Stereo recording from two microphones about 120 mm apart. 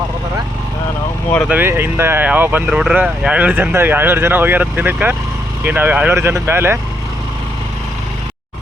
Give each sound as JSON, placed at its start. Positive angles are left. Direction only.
{"t": 1.5, "sound": "speech", "side_deg": -15}
{"t": 2.6, "sound": "speech", "side_deg": -5}